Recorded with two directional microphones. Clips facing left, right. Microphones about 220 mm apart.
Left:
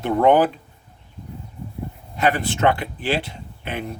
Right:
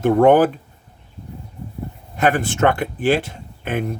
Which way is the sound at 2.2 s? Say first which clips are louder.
Right 3 dB; 50° right (ahead or behind).